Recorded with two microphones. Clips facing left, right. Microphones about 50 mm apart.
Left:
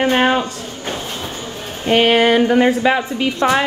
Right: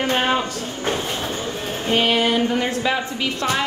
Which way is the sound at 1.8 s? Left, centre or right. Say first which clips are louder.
Left 6 dB; left.